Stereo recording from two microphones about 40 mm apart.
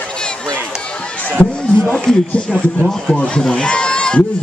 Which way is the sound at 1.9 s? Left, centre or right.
Centre.